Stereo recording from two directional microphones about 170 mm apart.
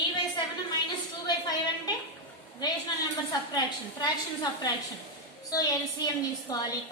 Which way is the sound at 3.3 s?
25° left (ahead or behind).